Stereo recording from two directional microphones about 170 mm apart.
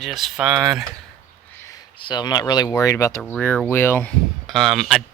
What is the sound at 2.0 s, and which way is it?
Speech, 25° left (ahead or behind).